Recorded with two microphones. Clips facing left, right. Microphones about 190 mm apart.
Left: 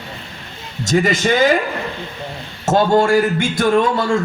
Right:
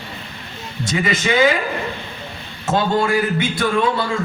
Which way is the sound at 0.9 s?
45° left (ahead or behind).